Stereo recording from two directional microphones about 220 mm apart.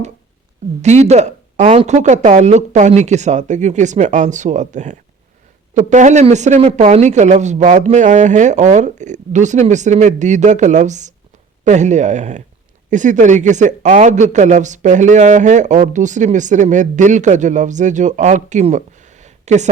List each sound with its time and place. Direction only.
0.8 s a man's voice: 30° right (ahead or behind)